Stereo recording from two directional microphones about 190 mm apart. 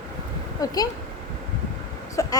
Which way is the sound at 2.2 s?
15° left (ahead or behind).